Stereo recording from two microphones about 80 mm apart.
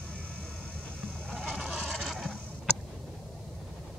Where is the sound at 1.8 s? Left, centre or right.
Centre.